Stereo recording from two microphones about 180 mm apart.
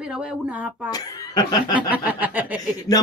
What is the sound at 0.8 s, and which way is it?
Speech, 20° left (ahead or behind).